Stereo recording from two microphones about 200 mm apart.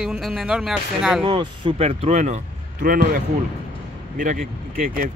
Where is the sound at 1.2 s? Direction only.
25° right (ahead or behind); by 3.2 s 40° right (ahead or behind).